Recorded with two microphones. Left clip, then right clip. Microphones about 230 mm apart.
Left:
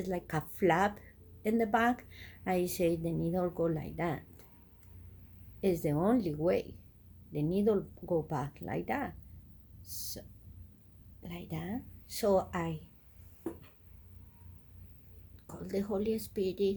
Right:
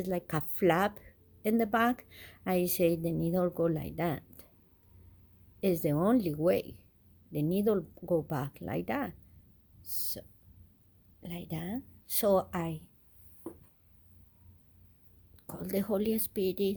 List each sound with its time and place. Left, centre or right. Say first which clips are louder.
0.0 s speech: right 2 dB; right
5.5 s speech: right 2 dB; right
15.4 s speech: right 3 dB; right